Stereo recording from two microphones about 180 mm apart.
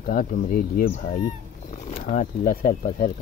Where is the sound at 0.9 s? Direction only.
40° left (ahead or behind).